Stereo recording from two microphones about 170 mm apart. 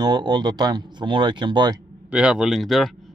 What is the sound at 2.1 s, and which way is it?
Speech, 5° right (ahead or behind).